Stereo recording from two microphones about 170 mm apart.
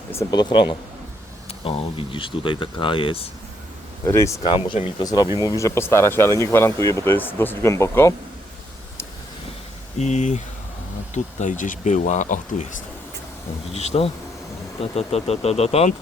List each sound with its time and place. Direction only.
0.1 s speech: 20° left (ahead or behind)
4.0 s speech: 15° left (ahead or behind)
4.4 s speech: 30° left (ahead or behind); by 8.1 s 15° left (ahead or behind)
10.0 s speech: 45° left (ahead or behind)
13.7 s speech: 40° left (ahead or behind)